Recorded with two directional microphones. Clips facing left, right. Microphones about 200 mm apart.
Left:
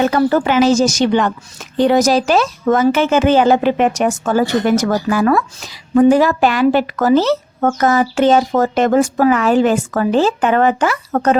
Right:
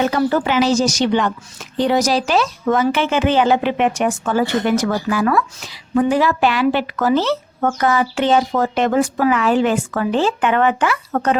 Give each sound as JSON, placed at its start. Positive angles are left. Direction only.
{"t": 0.0, "sound": "speech", "side_deg": 45}